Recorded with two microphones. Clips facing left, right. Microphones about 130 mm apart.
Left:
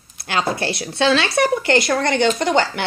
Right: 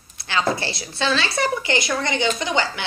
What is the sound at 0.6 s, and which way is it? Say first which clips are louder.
Speech: left 6 dB; 65° left (ahead or behind).